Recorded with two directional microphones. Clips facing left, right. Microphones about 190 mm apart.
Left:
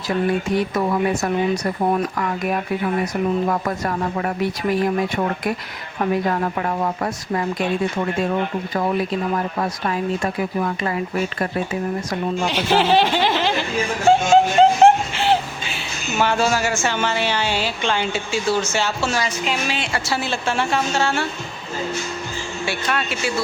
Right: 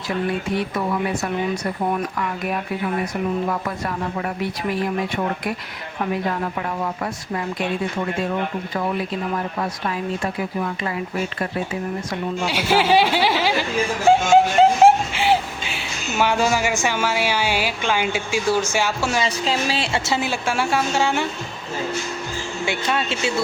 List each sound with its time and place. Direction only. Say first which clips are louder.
3.5 s speech: left 3 dB; 45° left (ahead or behind)
6.6 s speech: left 3 dB; 45° left (ahead or behind)
12.5 s speech: even; 10° right (ahead or behind)
19.2 s speech: right 1 dB; 35° right (ahead or behind)
20.1 s speech: even; 15° right (ahead or behind)
22.6 s speech: right 1 dB; 20° right (ahead or behind)